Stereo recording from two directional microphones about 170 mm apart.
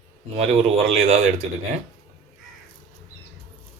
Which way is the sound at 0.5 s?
40° right (ahead or behind).